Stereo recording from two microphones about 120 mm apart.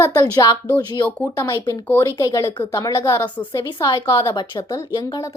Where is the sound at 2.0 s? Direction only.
30° left (ahead or behind).